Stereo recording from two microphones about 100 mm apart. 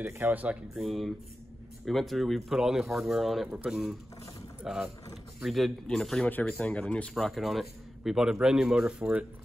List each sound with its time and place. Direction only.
0.0 s speech: 15° right (ahead or behind)
0.7 s a man's voice: centre (ahead or behind)